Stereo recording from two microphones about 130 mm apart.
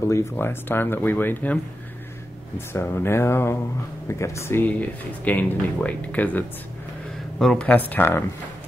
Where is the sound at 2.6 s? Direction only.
20° left (ahead or behind).